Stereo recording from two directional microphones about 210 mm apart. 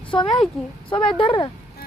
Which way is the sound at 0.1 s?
20° left (ahead or behind).